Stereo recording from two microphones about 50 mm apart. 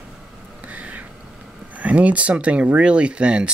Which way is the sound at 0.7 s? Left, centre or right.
Right.